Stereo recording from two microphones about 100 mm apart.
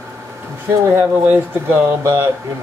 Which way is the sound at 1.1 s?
20° right (ahead or behind).